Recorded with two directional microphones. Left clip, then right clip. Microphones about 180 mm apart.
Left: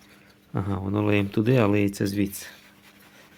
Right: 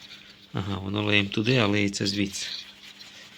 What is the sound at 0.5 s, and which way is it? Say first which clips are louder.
Speech: left 3 dB; 30° left (ahead or behind).